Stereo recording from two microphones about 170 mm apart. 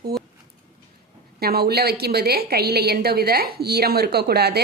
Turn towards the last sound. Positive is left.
turn(degrees=-70)  # may be behind; listen again after turning